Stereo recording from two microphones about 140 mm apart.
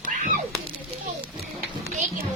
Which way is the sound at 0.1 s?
70° right (ahead or behind).